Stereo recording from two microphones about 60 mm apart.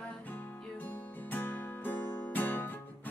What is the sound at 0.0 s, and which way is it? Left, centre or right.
Music, left.